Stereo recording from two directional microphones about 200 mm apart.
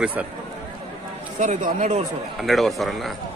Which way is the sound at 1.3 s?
40° right (ahead or behind).